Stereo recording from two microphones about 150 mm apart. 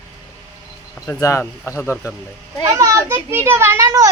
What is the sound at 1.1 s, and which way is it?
Speech, 20° left (ahead or behind).